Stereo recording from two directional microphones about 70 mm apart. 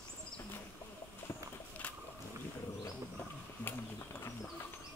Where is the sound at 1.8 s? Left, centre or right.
Left.